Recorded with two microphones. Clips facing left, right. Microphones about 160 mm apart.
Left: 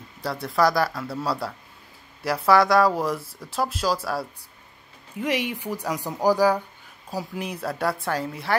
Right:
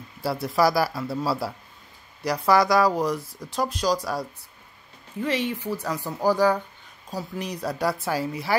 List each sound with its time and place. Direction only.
0.2 s a woman's voice: 5° right (ahead or behind)